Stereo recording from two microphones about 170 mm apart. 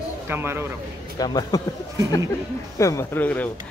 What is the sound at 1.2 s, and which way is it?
Speech, 25° left (ahead or behind).